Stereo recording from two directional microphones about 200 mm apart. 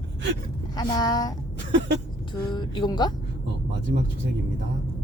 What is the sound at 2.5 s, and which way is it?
Speech, 20° left (ahead or behind).